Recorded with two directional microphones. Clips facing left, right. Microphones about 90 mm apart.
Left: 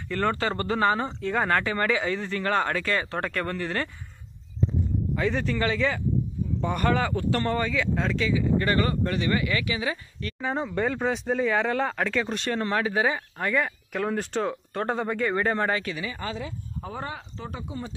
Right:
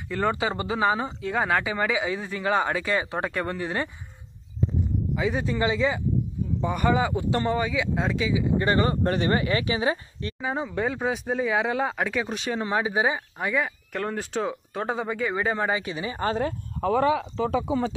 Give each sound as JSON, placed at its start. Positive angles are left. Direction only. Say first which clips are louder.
{"t": 0.1, "sound": "speech", "louder": "right 1 dB", "side_deg": -10}
{"t": 5.1, "sound": "speech", "louder": "even", "side_deg": -10}
{"t": 9.0, "sound": "speech", "louder": "right 2 dB", "side_deg": -35}
{"t": 10.4, "sound": "speech", "louder": "left 1 dB", "side_deg": -5}
{"t": 15.8, "sound": "speech", "louder": "right 1 dB", "side_deg": -25}
{"t": 16.2, "sound": "speech", "louder": "right 8 dB", "side_deg": -45}
{"t": 16.8, "sound": "speech", "louder": "right 14 dB", "side_deg": -90}